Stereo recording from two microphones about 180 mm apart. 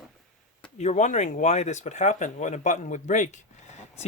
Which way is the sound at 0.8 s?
40° left (ahead or behind).